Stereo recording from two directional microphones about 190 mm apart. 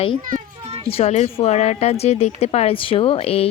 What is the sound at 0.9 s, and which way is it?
A woman's voice, 30° left (ahead or behind).